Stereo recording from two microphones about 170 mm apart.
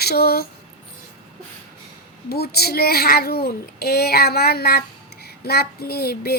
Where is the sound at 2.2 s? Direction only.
65° left (ahead or behind).